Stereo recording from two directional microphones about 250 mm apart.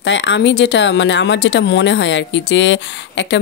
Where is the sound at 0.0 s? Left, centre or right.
Left.